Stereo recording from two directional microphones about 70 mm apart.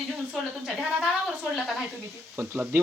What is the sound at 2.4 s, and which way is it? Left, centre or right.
Speech, right.